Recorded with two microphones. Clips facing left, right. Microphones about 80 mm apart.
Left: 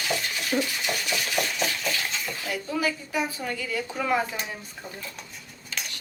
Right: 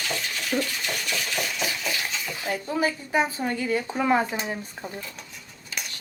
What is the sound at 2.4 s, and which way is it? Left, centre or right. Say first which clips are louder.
A woman's voice: right 3 dB; right.